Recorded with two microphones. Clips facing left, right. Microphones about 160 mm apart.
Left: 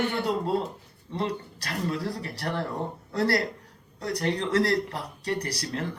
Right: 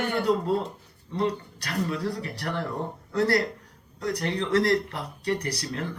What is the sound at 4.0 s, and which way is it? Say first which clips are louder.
Speech: even; 35° left (ahead or behind).